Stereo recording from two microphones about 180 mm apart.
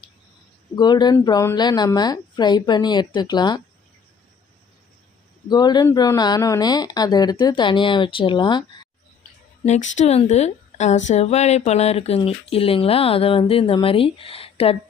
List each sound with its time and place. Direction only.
0.8 s speech: 25° left (ahead or behind)
5.5 s speech: 25° left (ahead or behind)
9.6 s a woman's voice: 40° left (ahead or behind)